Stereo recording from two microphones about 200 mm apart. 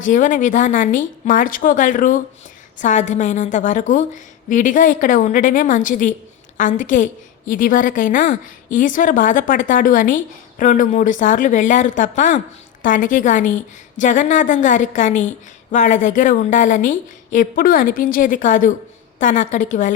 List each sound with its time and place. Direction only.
0.0 s a woman's voice: 40° left (ahead or behind)